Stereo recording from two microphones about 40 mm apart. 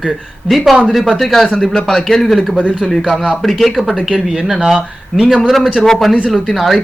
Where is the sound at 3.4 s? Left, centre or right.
Centre.